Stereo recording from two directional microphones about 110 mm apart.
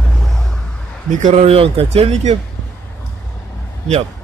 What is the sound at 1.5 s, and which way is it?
Speech, 60° right (ahead or behind).